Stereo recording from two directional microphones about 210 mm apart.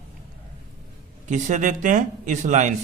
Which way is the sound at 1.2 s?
35° right (ahead or behind).